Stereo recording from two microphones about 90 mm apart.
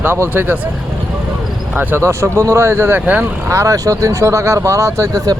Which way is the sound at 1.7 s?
20° right (ahead or behind).